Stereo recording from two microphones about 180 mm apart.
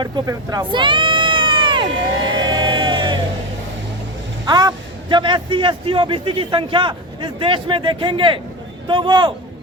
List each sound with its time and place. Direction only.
0.0 s speech: 25° right (ahead or behind)
2.4 s music: 25° right (ahead or behind)
4.4 s a man's voice: 25° right (ahead or behind)